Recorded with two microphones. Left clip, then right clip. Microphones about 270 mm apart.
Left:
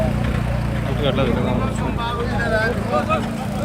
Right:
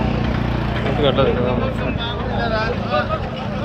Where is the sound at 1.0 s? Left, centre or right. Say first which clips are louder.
Right 4 dB; centre.